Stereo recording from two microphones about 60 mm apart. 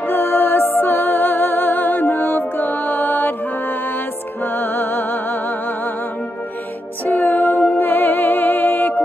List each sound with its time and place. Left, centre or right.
0.0 s music: left
4.4 s music: left
7.1 s music: left